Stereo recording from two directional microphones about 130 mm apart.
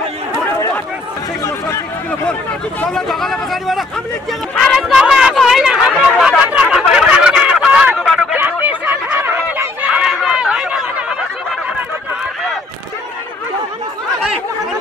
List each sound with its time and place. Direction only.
0.3 s chatter: 20° left (ahead or behind)
2.8 s speech: 5° left (ahead or behind)
4.3 s a sound: centre (ahead or behind)
8.3 s chatter: 15° right (ahead or behind)